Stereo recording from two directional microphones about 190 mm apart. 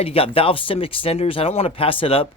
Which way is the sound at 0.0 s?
30° left (ahead or behind).